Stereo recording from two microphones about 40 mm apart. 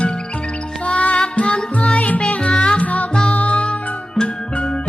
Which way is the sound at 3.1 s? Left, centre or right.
Left.